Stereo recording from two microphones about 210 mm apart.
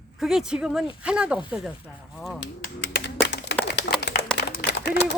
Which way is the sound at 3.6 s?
55° left (ahead or behind).